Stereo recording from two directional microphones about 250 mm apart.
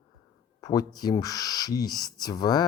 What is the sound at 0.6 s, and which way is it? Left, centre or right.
Speech, centre.